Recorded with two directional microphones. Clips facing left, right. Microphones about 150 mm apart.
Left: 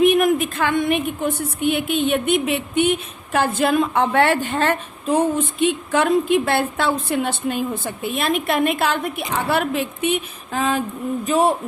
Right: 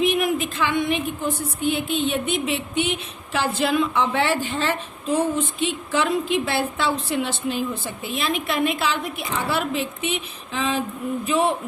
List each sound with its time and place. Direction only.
0.0 s a woman's voice: 50° left (ahead or behind)